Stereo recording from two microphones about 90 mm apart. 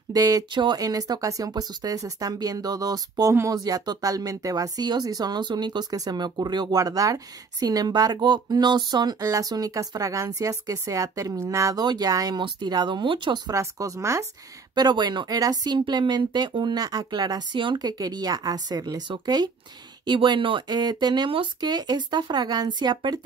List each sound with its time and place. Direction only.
0.1 s speech: 45° right (ahead or behind)
0.5 s speech: 60° right (ahead or behind)
0.7 s speech: 45° right (ahead or behind)
9.2 s speech: 40° right (ahead or behind)
12.4 s speech: 60° right (ahead or behind)
13.5 s speech: 40° right (ahead or behind)
14.8 s speech: 55° right (ahead or behind)
17.7 s speech: 45° right (ahead or behind)
20.1 s speech: 65° right (ahead or behind)
20.6 s speech: 50° right (ahead or behind)